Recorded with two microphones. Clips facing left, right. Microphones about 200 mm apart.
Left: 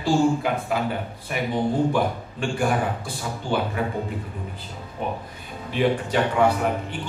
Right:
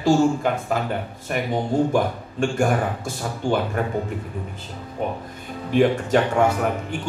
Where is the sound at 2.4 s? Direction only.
45° right (ahead or behind).